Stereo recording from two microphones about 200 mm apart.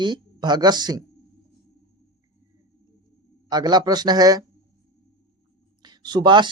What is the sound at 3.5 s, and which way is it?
Speech, 20° right (ahead or behind).